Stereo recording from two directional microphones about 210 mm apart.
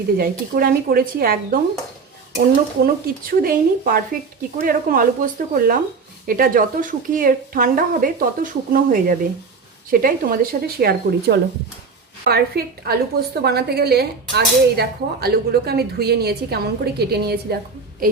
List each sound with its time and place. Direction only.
0.2 s speech: 45° right (ahead or behind)
2.8 s a woman's voice: 45° right (ahead or behind)